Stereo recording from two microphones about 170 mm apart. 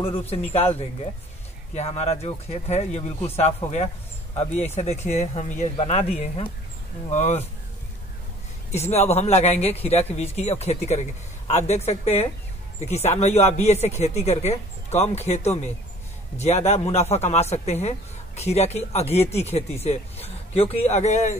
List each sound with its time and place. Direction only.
0.0 s a man's voice: 35° left (ahead or behind)
8.7 s a man's voice: 40° left (ahead or behind)